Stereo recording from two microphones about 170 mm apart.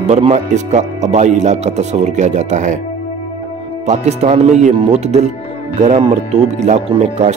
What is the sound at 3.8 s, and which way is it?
Speech, 40° right (ahead or behind).